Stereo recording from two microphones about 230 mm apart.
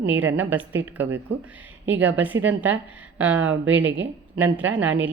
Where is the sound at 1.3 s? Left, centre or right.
Right.